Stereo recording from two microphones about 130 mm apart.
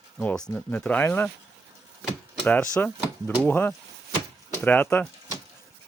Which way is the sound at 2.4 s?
10° left (ahead or behind).